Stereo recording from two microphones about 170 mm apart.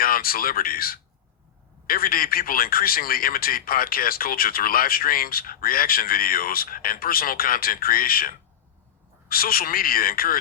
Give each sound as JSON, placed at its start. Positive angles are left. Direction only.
{"t": 0.0, "sound": "a man's voice", "side_deg": 60}
{"t": 9.3, "sound": "a man's voice", "side_deg": 60}